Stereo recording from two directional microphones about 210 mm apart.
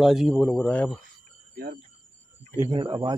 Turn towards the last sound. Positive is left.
turn(degrees=-20)  # may be behind; listen again after turning